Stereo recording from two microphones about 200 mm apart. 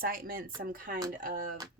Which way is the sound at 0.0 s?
45° right (ahead or behind).